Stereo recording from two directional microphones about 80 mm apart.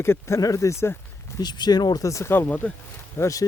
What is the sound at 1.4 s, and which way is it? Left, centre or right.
Speech, left.